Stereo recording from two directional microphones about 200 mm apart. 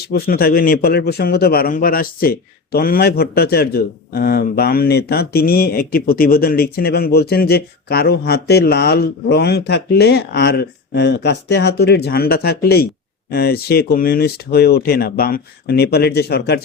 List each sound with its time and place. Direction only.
0.1 s a man's voice: 50° left (ahead or behind)